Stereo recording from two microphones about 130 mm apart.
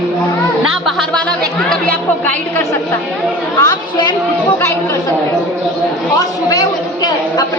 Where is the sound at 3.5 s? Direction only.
35° left (ahead or behind).